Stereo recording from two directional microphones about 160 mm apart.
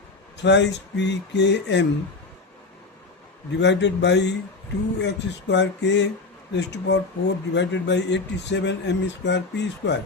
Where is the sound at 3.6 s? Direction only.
90° left.